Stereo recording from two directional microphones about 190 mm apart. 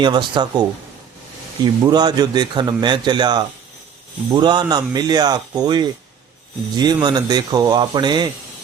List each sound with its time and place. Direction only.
0.0 s a man's voice: 25° right (ahead or behind)
1.6 s a man's voice: 20° right (ahead or behind)